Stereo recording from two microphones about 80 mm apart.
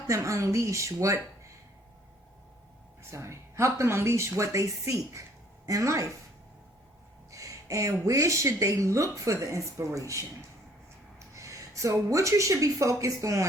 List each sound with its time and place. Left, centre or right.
0.1 s a woman's voice: right
3.0 s a woman's voice: right
7.3 s a sound: right
8.0 s a woman's voice: right
11.3 s speech: right